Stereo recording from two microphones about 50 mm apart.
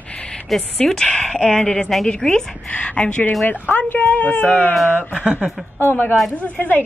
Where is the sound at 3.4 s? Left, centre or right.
Left.